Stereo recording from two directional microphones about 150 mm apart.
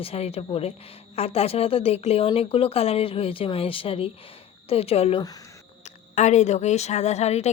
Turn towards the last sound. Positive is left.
turn(degrees=45)  # may be behind; listen again after turning